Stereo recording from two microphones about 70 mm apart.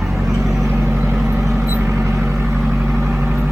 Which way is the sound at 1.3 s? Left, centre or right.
Centre.